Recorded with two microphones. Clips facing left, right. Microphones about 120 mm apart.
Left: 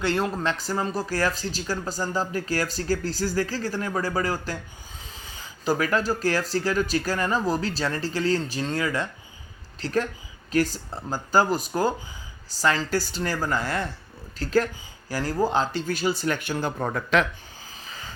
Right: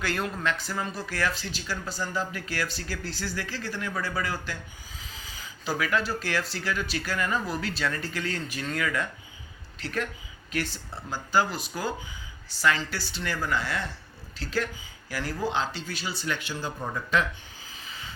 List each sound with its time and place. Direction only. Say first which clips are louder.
0.0 s speech: left 5 dB; 30° left (ahead or behind); by 17.2 s 70° left (ahead or behind)
17.8 s vehicle: left 2 dB; 35° left (ahead or behind)